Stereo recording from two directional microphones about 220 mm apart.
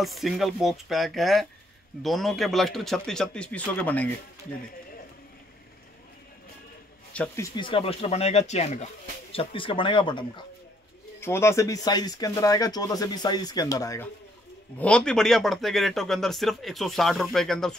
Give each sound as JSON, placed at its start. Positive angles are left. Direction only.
{"t": 0.0, "sound": "speech", "side_deg": 0}
{"t": 7.1, "sound": "speech", "side_deg": 5}
{"t": 7.5, "sound": "speech", "side_deg": 25}
{"t": 11.1, "sound": "speech", "side_deg": 10}
{"t": 14.8, "sound": "speech", "side_deg": 5}